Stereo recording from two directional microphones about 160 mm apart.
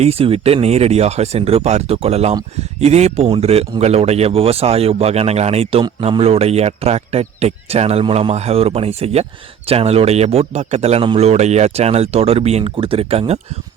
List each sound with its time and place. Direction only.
0.0 s a man's voice: 40° right (ahead or behind)